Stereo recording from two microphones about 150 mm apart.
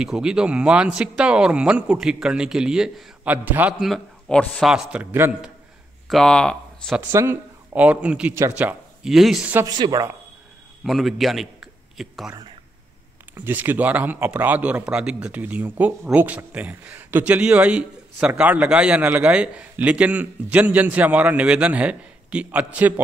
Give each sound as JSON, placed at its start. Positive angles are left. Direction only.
{"t": 0.0, "sound": "a man's voice", "side_deg": -5}
{"t": 3.8, "sound": "a man's voice", "side_deg": 5}
{"t": 6.0, "sound": "speech", "side_deg": 5}
{"t": 7.1, "sound": "a man's voice", "side_deg": -15}
{"t": 9.7, "sound": "speech", "side_deg": -25}
{"t": 10.8, "sound": "a man's voice", "side_deg": 0}
{"t": 13.3, "sound": "a man's voice", "side_deg": -15}